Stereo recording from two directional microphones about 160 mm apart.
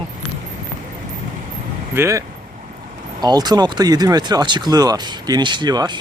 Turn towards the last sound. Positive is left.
turn(degrees=-25)  # may be behind; listen again after turning